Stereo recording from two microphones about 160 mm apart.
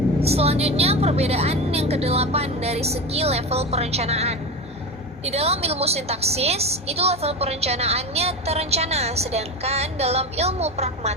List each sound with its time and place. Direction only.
0.2 s a woman's voice: 40° right (ahead or behind)